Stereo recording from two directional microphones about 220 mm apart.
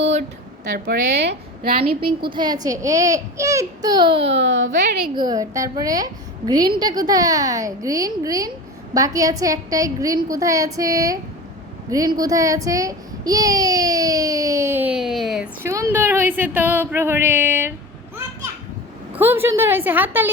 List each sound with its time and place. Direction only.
0.0 s a sound: 30° right (ahead or behind)
0.9 s a woman's voice: 50° right (ahead or behind)
2.0 s a child's voice: 20° right (ahead or behind)
4.4 s a woman's voice: 55° right (ahead or behind)
5.1 s a child's voice: 20° right (ahead or behind); by 15.4 s centre (ahead or behind)
15.6 s a child's voice: 10° right (ahead or behind)
19.1 s a child's voice: 10° right (ahead or behind)